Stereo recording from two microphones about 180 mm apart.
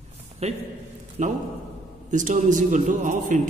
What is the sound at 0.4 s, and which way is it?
A man's voice, 35° right (ahead or behind).